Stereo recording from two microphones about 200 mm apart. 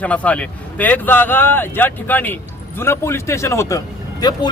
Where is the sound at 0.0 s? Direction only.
5° left (ahead or behind).